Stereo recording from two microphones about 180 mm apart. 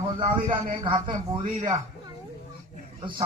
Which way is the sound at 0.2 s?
25° right (ahead or behind).